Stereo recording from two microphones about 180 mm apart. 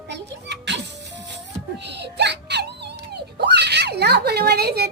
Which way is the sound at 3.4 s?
70° right (ahead or behind).